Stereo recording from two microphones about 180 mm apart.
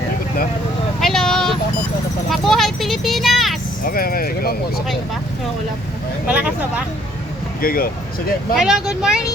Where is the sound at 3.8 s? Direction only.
55° left (ahead or behind).